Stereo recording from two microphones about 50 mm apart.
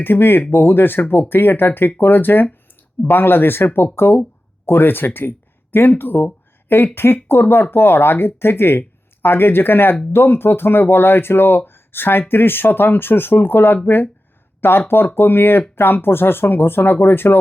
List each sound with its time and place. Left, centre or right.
0.0 s speech: left